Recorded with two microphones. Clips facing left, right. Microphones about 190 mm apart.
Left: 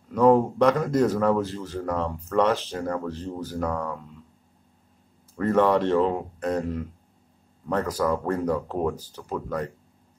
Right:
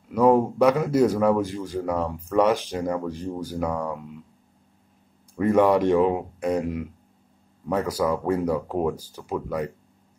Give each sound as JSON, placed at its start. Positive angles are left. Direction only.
{"t": 0.1, "sound": "speech", "side_deg": -10}
{"t": 5.3, "sound": "speech", "side_deg": -15}